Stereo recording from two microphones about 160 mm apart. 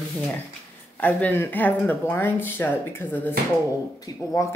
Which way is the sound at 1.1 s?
10° left (ahead or behind).